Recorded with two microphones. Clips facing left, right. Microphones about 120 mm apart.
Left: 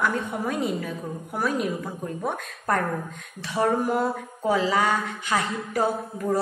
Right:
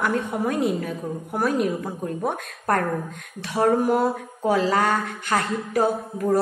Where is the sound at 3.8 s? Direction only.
55° right (ahead or behind).